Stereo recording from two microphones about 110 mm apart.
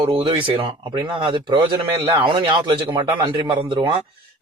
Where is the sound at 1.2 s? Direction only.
45° right (ahead or behind).